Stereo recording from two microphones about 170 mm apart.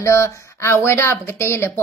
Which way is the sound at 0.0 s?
15° left (ahead or behind).